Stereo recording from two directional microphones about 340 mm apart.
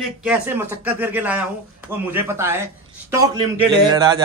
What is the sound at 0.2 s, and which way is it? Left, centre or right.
Speech, centre.